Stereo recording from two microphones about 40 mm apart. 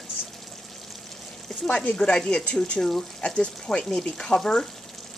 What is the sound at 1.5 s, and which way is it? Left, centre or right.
Speech, centre.